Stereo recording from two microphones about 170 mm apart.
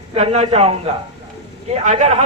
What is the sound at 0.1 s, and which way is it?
A man's voice, 35° right (ahead or behind).